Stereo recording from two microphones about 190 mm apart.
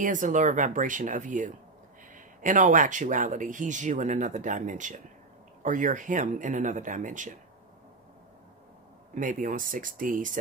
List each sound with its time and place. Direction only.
0.0 s speech: 45° right (ahead or behind)
9.1 s speech: 45° right (ahead or behind)